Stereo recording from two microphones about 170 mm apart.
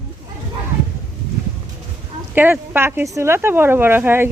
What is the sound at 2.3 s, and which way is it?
Speech, 10° right (ahead or behind).